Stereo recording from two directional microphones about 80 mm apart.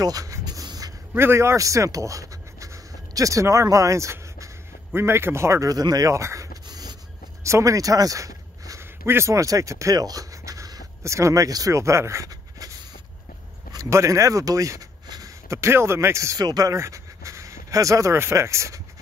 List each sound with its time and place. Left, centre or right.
0.0 s a sound: right
1.1 s speech: right
7.4 s a sound: right
9.0 s speech: right
16.3 s speech: right
16.7 s speech: right